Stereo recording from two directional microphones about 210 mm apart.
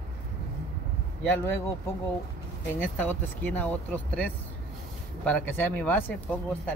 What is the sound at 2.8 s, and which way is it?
Speech, 10° left (ahead or behind).